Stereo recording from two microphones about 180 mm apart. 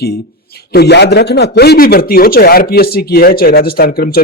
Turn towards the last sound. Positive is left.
turn(degrees=55)  # may be behind; listen again after turning